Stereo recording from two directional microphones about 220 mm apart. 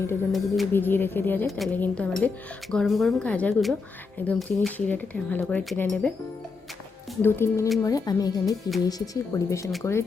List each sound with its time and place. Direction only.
0.3 s speech: centre (ahead or behind)
7.2 s speech: 10° left (ahead or behind)